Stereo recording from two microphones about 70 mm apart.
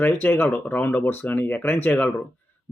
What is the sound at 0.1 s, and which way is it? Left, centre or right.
Speech, left.